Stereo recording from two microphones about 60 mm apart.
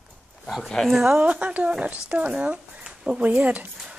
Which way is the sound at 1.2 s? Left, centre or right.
Right.